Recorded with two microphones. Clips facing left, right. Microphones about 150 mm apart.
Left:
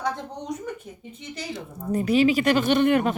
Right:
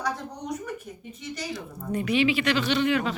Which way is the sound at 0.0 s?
25° left (ahead or behind).